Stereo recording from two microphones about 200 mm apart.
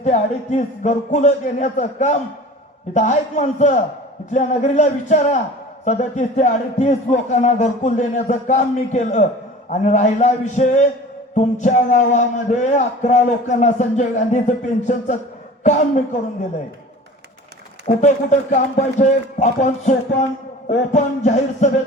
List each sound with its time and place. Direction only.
0.0 s a man's voice: 35° left (ahead or behind)
17.8 s a man's voice: 35° left (ahead or behind)